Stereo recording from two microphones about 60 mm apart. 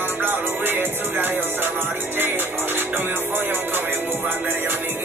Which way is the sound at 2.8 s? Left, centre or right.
Right.